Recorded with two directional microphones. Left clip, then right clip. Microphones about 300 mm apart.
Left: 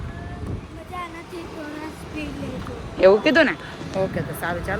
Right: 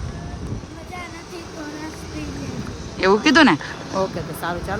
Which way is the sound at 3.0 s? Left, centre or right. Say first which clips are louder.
Even; centre.